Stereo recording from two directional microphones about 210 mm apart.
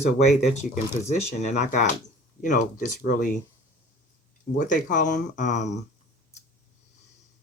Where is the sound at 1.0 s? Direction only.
35° left (ahead or behind).